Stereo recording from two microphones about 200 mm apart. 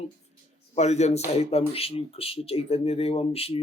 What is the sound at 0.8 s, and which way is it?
Speech, 35° left (ahead or behind).